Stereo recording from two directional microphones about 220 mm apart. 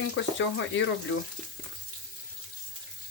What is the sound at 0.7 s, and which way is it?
Speech, 60° left (ahead or behind).